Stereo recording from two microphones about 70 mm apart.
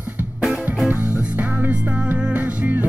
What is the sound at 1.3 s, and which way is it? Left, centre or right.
Music, right.